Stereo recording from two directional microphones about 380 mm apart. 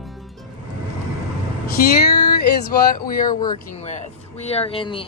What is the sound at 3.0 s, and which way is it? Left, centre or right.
Speech, left.